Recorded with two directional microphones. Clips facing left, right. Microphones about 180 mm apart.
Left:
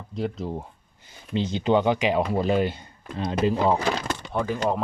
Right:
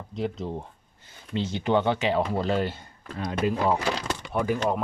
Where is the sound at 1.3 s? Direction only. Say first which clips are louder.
Left 3 dB; 20° left (ahead or behind).